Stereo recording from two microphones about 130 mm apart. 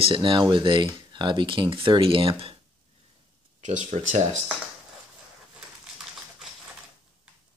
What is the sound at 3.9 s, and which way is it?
Speech, 65° right (ahead or behind).